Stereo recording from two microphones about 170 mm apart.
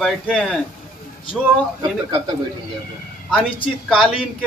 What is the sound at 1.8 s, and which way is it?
Speech, 25° right (ahead or behind).